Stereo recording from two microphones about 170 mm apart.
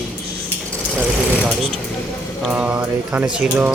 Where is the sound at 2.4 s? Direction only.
5° right (ahead or behind).